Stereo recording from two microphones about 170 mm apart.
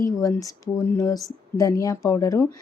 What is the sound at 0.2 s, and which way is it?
Speech, 20° left (ahead or behind).